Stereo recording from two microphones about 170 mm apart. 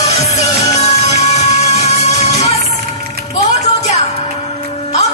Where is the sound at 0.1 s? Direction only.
40° left (ahead or behind).